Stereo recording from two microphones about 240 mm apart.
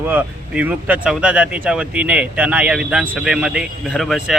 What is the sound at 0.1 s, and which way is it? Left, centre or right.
Speech, centre.